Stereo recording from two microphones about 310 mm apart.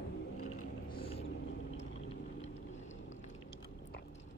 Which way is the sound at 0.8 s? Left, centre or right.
Centre.